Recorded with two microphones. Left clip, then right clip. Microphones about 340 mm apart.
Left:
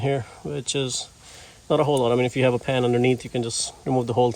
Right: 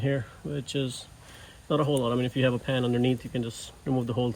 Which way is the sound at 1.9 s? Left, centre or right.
Centre.